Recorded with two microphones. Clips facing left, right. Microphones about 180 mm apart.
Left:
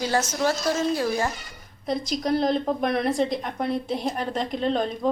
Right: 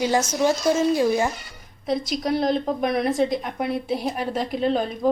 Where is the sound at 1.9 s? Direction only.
Centre (ahead or behind).